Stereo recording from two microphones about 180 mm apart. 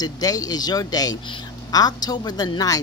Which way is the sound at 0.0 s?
20° left (ahead or behind).